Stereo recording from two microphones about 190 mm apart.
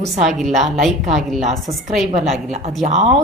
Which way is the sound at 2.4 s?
40° right (ahead or behind).